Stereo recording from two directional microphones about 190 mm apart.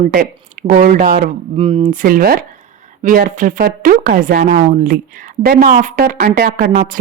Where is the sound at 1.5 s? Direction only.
30° right (ahead or behind); by 7.0 s 50° right (ahead or behind).